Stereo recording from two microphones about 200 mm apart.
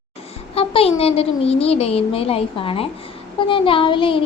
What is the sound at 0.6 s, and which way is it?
A woman's voice, 30° left (ahead or behind).